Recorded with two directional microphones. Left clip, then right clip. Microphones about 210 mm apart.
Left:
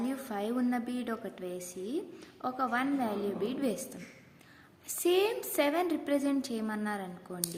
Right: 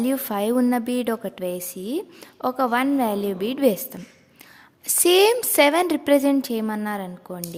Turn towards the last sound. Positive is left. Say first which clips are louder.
# right 7 dB
turn(degrees=-45)  # may be behind; listen again after turning